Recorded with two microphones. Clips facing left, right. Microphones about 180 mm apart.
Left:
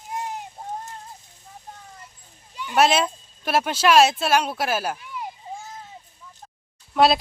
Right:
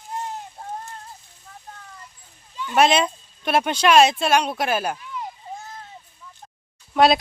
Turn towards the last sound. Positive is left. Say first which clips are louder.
# right 1 dB
turn(degrees=0)  # may be behind; listen again after turning